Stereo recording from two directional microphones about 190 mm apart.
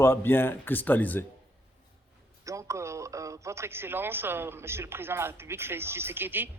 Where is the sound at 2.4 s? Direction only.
15° right (ahead or behind).